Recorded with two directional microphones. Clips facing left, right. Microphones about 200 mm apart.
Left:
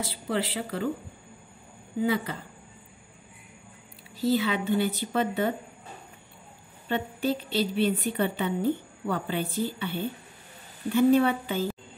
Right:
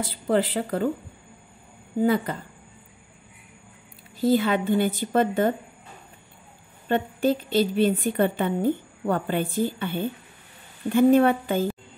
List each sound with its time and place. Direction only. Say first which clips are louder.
0.0 s a woman's voice: right 6 dB; 50° right (ahead or behind)
2.0 s a woman's voice: right 5 dB; 50° right (ahead or behind)
4.2 s a woman's voice: right 4 dB; 50° right (ahead or behind)
6.9 s a woman's voice: right 5 dB; 50° right (ahead or behind)